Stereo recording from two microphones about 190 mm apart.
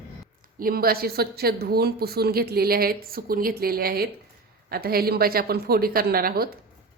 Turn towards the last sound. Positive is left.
turn(degrees=-50)  # may be behind; listen again after turning